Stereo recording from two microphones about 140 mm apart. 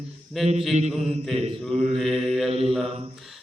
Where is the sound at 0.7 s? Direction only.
50° right (ahead or behind).